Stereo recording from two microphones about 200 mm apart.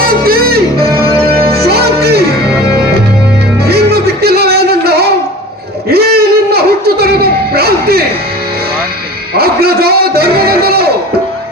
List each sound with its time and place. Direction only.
0.1 s music: 50° right (ahead or behind)
3.6 s music: 50° right (ahead or behind)
9.3 s a sound: 50° right (ahead or behind)